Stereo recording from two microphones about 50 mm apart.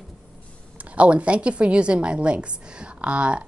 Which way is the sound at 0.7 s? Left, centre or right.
Right.